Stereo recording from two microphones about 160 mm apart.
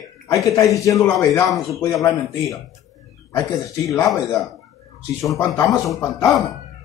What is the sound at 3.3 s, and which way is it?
Speech, 20° left (ahead or behind).